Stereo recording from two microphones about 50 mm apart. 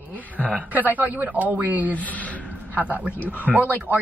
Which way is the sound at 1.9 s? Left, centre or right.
Left.